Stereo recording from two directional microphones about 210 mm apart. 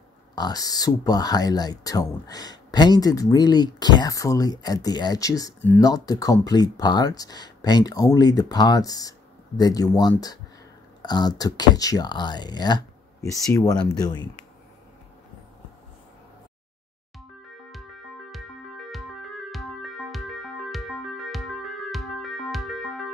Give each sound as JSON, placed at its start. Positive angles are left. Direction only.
{"t": 0.4, "sound": "speech", "side_deg": 20}
{"t": 19.5, "sound": "music", "side_deg": 0}
{"t": 21.9, "sound": "music", "side_deg": 0}